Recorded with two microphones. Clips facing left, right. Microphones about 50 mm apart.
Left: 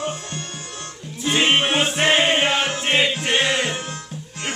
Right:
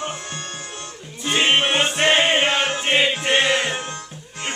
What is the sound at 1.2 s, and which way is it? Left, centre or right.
Music, centre.